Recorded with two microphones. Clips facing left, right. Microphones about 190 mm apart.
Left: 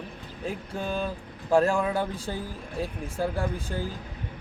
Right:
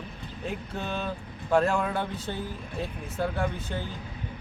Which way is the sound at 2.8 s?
10° left (ahead or behind).